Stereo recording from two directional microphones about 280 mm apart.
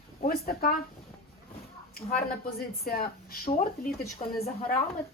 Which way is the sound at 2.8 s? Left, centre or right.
Left.